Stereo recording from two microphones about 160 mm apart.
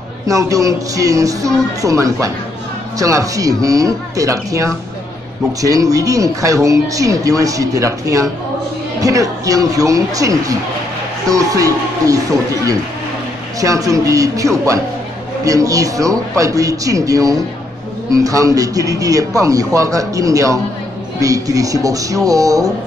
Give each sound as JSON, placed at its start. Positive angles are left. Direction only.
{"t": 0.3, "sound": "speech", "side_deg": -20}
{"t": 13.6, "sound": "speech", "side_deg": -20}